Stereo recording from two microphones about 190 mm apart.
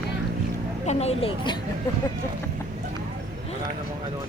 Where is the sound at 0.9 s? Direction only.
35° left (ahead or behind).